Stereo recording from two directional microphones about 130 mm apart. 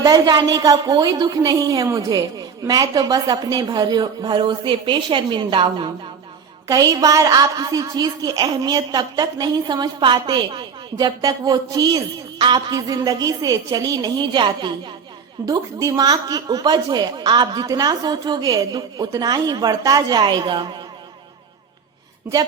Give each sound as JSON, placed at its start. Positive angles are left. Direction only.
{"t": 0.0, "sound": "a woman's voice", "side_deg": -30}
{"t": 6.7, "sound": "a woman's voice", "side_deg": -30}
{"t": 15.4, "sound": "a woman's voice", "side_deg": -25}